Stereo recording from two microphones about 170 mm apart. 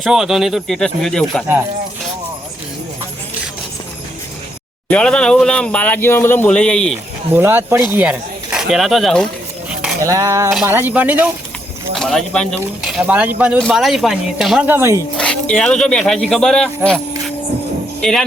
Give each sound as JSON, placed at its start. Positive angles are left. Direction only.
{"t": 0.0, "sound": "speech", "side_deg": 0}
{"t": 4.9, "sound": "speech", "side_deg": 5}
{"t": 7.3, "sound": "speech", "side_deg": -10}
{"t": 9.6, "sound": "a sound", "side_deg": -5}
{"t": 10.0, "sound": "a sound", "side_deg": -20}
{"t": 10.7, "sound": "speech", "side_deg": -10}
{"t": 11.9, "sound": "speech", "side_deg": 0}
{"t": 14.7, "sound": "speech", "side_deg": -15}
{"t": 15.2, "sound": "speech", "side_deg": 5}